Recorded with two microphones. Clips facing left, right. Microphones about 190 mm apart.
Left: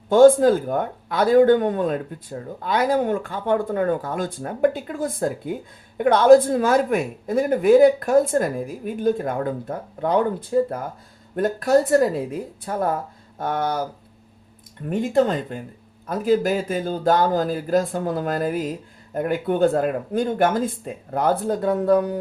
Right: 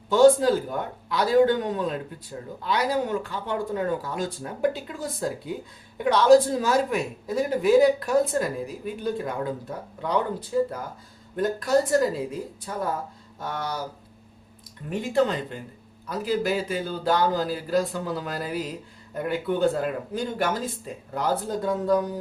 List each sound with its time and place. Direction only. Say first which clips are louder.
0.1 s speech: left 4 dB; 50° left (ahead or behind)
14.8 s speech: left 4 dB; 45° left (ahead or behind)